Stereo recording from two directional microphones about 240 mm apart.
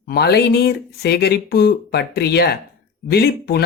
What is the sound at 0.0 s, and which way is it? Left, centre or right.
Speech, left.